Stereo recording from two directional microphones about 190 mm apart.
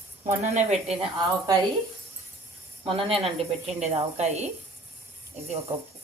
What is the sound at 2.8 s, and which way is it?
Speech, 30° right (ahead or behind).